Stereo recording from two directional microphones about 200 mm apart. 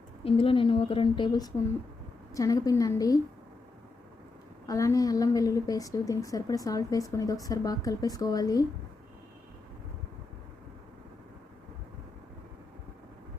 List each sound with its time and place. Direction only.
0.3 s a woman's voice: 25° left (ahead or behind)
4.6 s a woman's voice: 15° left (ahead or behind)